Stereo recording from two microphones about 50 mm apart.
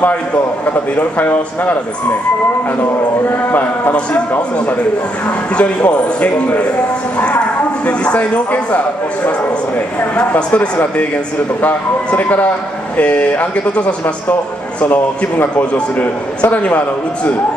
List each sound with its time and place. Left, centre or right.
0.0 s a man's voice: left
3.3 s a man's voice: left
14.8 s a man's voice: left